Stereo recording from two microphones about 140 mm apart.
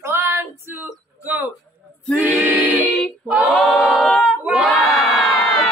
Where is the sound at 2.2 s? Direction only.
10° right (ahead or behind).